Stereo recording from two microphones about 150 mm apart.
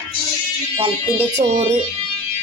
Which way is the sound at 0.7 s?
40° right (ahead or behind).